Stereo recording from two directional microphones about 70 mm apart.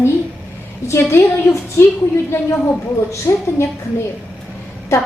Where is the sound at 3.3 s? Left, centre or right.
Left.